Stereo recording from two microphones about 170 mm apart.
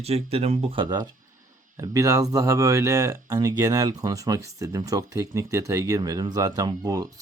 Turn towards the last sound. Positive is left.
turn(degrees=-20)  # may be behind; listen again after turning